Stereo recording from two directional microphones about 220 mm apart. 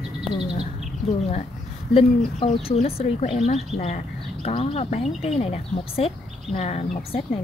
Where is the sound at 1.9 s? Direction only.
25° left (ahead or behind).